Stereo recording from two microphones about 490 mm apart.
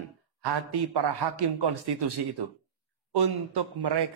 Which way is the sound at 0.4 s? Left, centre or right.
Right.